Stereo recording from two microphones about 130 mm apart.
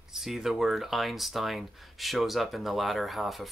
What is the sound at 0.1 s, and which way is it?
Speech, centre (ahead or behind).